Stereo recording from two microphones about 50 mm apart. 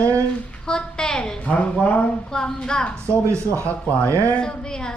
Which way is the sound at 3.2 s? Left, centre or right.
Right.